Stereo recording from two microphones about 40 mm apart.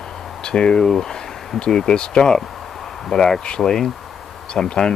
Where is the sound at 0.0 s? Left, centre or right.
Left.